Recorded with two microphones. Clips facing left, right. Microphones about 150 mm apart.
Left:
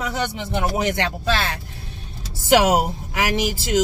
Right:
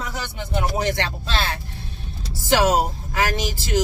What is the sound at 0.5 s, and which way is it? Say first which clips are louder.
Speech: even; 15° left (ahead or behind).